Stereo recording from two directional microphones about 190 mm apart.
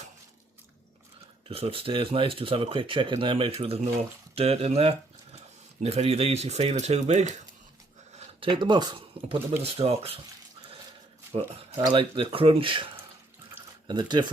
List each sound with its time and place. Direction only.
1.5 s speech: 30° right (ahead or behind)
8.4 s speech: 25° right (ahead or behind)
11.3 s speech: 35° right (ahead or behind)